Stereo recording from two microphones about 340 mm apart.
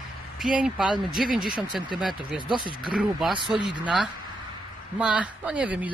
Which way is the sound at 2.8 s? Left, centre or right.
Centre.